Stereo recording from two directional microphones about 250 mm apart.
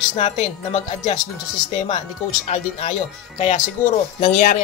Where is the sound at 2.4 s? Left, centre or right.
Left.